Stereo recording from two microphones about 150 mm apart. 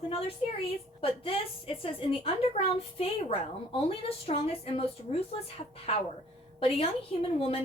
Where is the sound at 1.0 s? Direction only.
35° left (ahead or behind).